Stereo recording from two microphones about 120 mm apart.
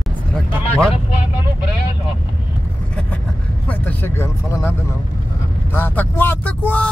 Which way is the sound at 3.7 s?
15° left (ahead or behind).